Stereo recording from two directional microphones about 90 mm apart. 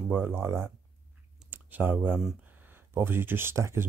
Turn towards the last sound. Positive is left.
turn(degrees=-30)  # may be behind; listen again after turning